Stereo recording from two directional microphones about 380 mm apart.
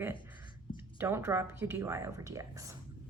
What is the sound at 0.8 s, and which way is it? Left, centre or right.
A woman's voice, centre.